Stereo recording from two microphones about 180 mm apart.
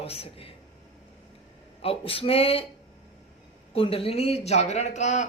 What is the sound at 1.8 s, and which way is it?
Speech, 30° left (ahead or behind).